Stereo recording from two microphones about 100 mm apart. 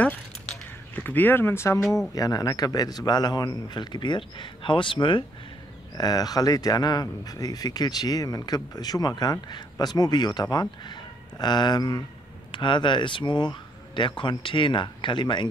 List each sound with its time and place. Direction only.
0.0 s a sound: 15° left (ahead or behind)
2.1 s a man's voice: 40° left (ahead or behind); by 5.2 s 55° left (ahead or behind)
5.9 s a man's voice: 40° left (ahead or behind)